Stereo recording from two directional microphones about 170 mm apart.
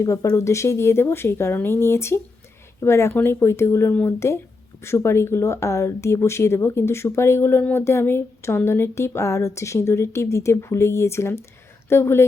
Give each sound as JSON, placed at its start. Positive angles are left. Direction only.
{"t": 0.0, "sound": "speech", "side_deg": 20}